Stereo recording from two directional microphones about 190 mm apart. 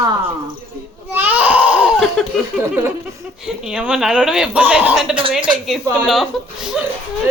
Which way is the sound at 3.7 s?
5° right (ahead or behind).